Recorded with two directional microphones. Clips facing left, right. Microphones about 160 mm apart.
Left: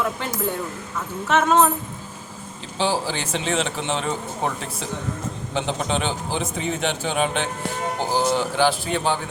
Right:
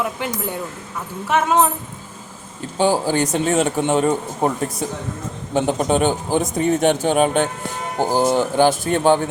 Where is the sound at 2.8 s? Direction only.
50° right (ahead or behind).